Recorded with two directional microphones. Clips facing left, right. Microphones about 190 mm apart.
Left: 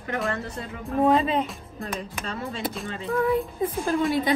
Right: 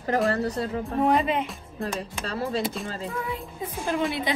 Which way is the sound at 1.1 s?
30° left (ahead or behind).